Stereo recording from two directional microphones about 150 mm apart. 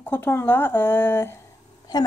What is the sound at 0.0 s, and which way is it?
A woman's voice, 15° left (ahead or behind).